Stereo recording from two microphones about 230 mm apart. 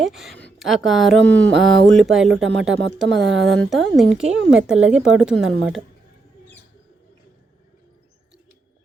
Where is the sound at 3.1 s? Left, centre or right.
Right.